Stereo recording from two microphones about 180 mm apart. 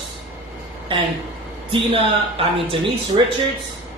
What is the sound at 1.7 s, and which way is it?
Speech, 30° right (ahead or behind).